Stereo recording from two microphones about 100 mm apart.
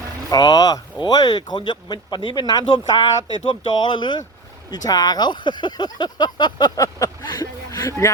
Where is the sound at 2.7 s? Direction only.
55° left (ahead or behind).